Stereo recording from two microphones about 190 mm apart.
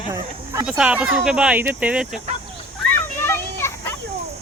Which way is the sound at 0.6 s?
5° right (ahead or behind).